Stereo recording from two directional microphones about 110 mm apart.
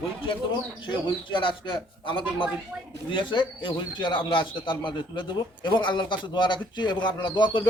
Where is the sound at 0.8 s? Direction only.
45° left (ahead or behind).